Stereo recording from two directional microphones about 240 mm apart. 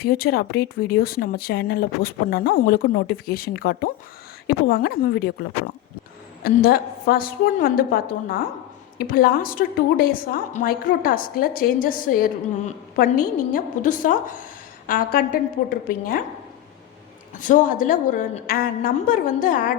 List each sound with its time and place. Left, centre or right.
0.0 s a woman's voice: left
17.4 s a woman's voice: left